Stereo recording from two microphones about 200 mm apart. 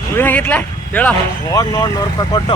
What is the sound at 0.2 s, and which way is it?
Speech, 10° left (ahead or behind).